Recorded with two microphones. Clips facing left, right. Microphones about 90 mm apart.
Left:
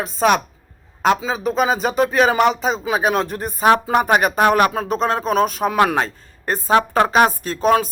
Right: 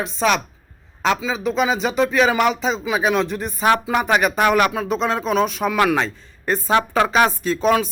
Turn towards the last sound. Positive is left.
turn(degrees=45)  # may be behind; listen again after turning